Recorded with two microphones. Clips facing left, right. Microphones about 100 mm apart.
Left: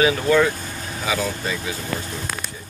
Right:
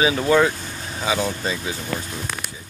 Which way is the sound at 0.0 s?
20° right (ahead or behind).